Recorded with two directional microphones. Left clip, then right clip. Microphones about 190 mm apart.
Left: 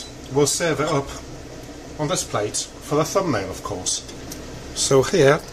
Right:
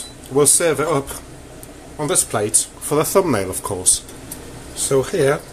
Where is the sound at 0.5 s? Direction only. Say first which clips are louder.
Right 4 dB; 45° right (ahead or behind).